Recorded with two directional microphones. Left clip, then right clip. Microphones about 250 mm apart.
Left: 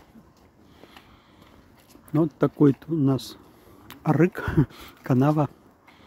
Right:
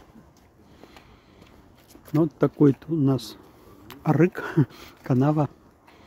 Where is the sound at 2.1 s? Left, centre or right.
Centre.